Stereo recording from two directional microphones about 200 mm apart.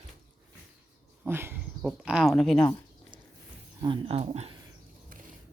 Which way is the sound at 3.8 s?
25° right (ahead or behind).